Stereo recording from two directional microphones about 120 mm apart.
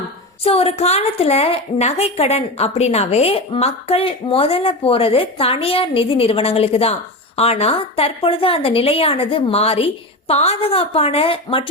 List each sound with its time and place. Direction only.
0.4 s a woman's voice: 55° left (ahead or behind)